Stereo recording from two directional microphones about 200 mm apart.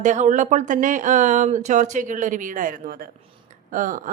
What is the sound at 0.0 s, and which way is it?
A woman's voice, 40° right (ahead or behind).